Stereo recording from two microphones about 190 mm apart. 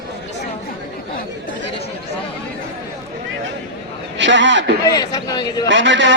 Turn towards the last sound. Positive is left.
turn(degrees=-75)  # may be behind; listen again after turning